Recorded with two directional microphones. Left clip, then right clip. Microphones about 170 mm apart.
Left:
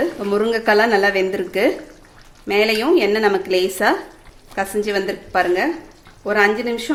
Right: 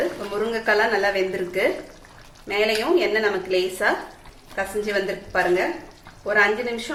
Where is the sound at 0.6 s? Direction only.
60° left (ahead or behind).